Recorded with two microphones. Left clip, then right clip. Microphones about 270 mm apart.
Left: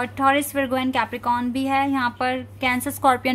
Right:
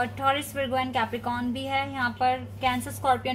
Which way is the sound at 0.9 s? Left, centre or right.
Left.